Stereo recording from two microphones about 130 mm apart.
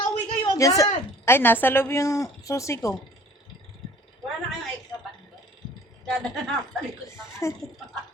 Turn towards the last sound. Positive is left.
turn(degrees=20)  # may be behind; listen again after turning